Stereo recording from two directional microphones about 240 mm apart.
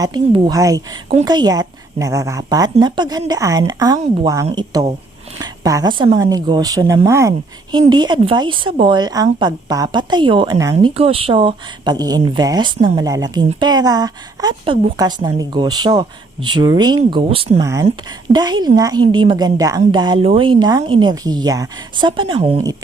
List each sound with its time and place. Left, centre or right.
0.0 s a woman's voice: centre